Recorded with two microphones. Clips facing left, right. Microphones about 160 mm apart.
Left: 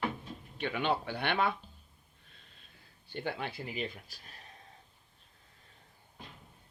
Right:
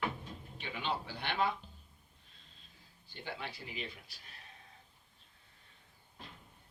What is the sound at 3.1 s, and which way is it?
Speech, 60° left (ahead or behind).